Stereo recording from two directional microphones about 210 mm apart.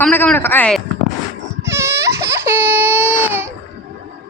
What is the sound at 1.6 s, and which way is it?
Baby cry, 15° right (ahead or behind).